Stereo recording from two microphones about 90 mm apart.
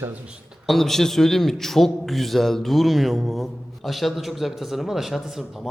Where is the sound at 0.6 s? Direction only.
5° left (ahead or behind).